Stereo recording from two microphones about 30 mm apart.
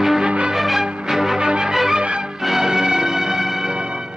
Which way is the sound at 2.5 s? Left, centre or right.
Centre.